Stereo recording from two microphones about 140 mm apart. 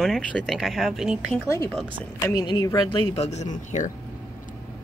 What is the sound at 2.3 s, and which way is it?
Speech, 35° left (ahead or behind).